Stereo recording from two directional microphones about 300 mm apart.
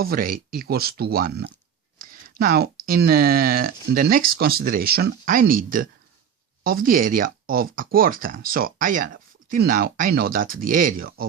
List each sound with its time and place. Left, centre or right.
0.0 s speech: right